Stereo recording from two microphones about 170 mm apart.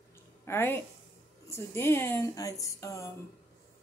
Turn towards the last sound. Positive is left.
turn(degrees=20)  # may be behind; listen again after turning